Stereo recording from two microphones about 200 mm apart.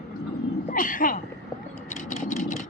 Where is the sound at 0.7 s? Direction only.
40° left (ahead or behind).